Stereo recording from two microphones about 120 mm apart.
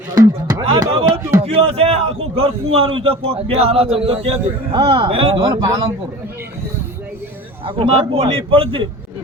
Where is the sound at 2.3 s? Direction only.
50° right (ahead or behind).